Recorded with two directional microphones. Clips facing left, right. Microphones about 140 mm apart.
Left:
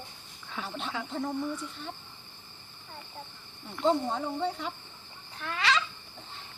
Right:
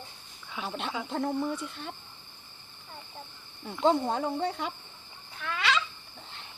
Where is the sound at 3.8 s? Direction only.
65° right (ahead or behind).